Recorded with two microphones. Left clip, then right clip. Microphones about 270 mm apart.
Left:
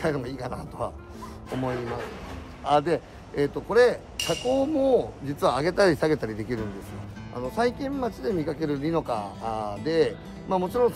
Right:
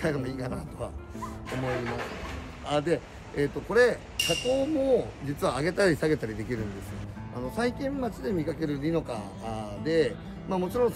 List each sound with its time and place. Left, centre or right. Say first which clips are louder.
0.0 s speech: left 2 dB; centre
2.6 s speech: left 5 dB; centre